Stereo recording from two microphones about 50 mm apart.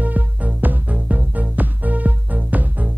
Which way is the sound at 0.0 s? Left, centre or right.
Right.